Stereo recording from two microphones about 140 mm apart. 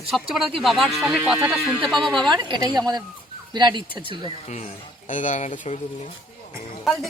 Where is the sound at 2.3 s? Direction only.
30° right (ahead or behind).